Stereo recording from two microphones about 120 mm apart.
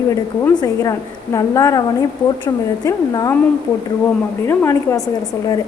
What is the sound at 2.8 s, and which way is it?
Speech, 30° left (ahead or behind).